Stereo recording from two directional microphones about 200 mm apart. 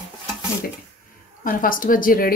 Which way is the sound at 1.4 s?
45° left (ahead or behind).